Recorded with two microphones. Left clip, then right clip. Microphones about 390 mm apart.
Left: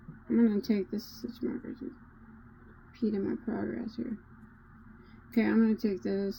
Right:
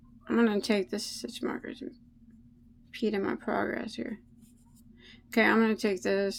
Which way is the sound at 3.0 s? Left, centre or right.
Right.